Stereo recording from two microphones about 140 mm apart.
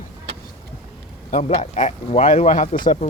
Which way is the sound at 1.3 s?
50° left (ahead or behind).